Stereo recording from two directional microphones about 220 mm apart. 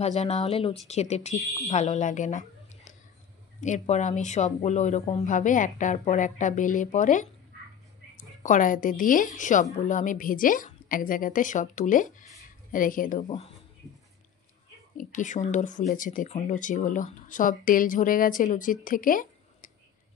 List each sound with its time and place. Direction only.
0.0 s a woman's voice: 30° left (ahead or behind)
15.0 s a woman's voice: 35° left (ahead or behind)